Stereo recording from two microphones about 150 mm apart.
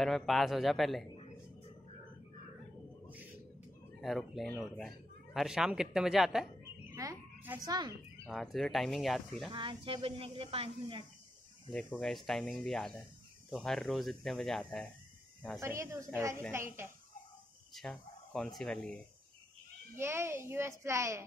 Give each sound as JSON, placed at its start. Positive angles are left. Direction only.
{"t": 0.0, "sound": "speech", "side_deg": 0}
{"t": 4.0, "sound": "speech", "side_deg": 0}
{"t": 7.0, "sound": "a woman's voice", "side_deg": -25}
{"t": 8.3, "sound": "speech", "side_deg": 0}
{"t": 9.5, "sound": "a woman's voice", "side_deg": -35}
{"t": 11.7, "sound": "speech", "side_deg": 5}
{"t": 15.6, "sound": "a child's voice", "side_deg": -15}
{"t": 17.7, "sound": "speech", "side_deg": 5}
{"t": 20.0, "sound": "a child's voice", "side_deg": -15}